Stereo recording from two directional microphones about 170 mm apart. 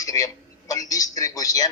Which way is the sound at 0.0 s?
20° left (ahead or behind).